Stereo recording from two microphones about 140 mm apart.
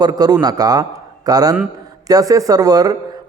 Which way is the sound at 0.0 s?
30° right (ahead or behind).